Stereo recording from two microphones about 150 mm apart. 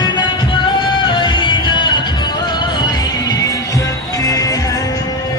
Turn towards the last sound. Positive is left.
turn(degrees=25)  # may be behind; listen again after turning